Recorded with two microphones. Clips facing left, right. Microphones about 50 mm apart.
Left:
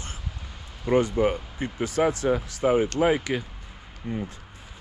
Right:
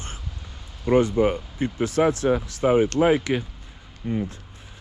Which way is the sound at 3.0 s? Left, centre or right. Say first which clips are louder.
Right 3 dB; right.